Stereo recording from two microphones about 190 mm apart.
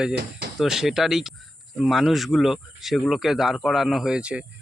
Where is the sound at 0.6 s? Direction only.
Centre (ahead or behind).